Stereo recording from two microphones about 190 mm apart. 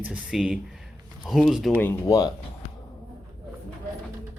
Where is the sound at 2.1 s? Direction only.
20° left (ahead or behind).